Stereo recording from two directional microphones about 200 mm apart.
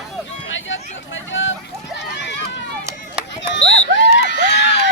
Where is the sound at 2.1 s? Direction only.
60° left (ahead or behind).